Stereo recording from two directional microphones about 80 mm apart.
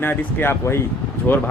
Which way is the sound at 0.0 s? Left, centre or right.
Left.